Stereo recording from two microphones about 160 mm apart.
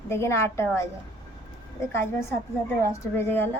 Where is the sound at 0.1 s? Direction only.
15° left (ahead or behind).